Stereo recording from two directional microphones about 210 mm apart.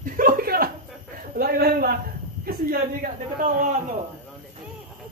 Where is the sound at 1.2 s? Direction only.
45° right (ahead or behind).